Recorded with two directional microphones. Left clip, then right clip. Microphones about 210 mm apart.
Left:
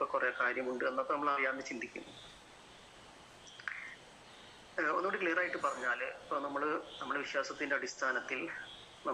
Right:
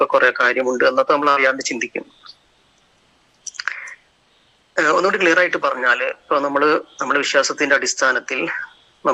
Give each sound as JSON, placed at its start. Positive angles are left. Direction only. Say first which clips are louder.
{"t": 0.0, "sound": "speech", "louder": "right 19 dB", "side_deg": -55}
{"t": 3.6, "sound": "a sound", "louder": "right 17 dB", "side_deg": -50}
{"t": 4.7, "sound": "speech", "louder": "right 18 dB", "side_deg": -50}